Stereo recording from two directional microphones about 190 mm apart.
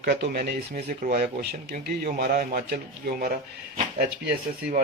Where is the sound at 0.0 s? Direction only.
55° right (ahead or behind).